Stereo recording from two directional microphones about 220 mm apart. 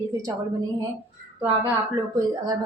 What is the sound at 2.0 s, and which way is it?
Speech, 15° right (ahead or behind).